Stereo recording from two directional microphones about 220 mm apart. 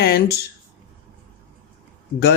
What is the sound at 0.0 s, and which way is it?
Speech, 45° left (ahead or behind).